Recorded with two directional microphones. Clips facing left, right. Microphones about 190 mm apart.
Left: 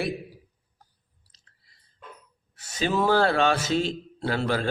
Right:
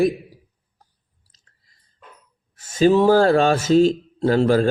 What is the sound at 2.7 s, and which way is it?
A man's voice, 40° right (ahead or behind).